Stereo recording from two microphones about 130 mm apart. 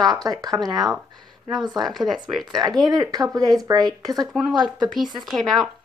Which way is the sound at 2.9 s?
30° right (ahead or behind).